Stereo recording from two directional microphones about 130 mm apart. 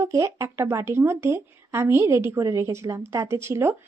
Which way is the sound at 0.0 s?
25° right (ahead or behind).